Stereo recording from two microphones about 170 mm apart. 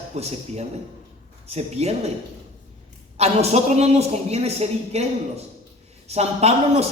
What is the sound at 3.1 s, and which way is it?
Speech, 40° right (ahead or behind).